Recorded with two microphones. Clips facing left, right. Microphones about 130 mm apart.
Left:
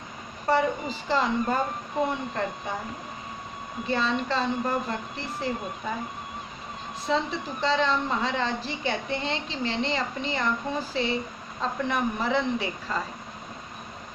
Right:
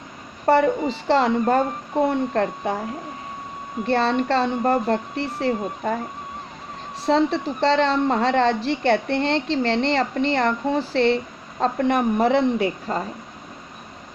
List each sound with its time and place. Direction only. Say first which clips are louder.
0.4 s a woman's voice: right 7 dB; 65° right (ahead or behind)
3.8 s speech: right 7 dB; 70° right (ahead or behind)
7.0 s a woman's voice: right 8 dB; 70° right (ahead or behind)
11.6 s speech: right 7 dB; 60° right (ahead or behind)